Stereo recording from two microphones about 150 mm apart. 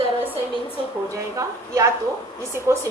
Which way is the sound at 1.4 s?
20° right (ahead or behind).